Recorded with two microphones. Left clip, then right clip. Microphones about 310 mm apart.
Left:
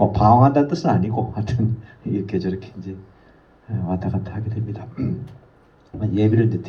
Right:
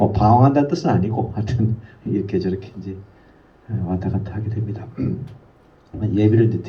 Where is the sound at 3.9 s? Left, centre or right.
Left.